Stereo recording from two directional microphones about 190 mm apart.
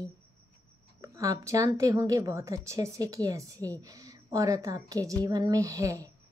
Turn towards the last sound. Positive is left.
turn(degrees=-15)  # may be behind; listen again after turning